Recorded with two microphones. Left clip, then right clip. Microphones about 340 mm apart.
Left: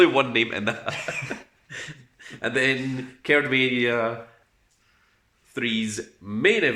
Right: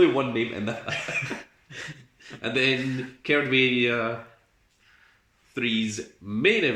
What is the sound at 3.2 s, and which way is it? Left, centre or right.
Speech, left.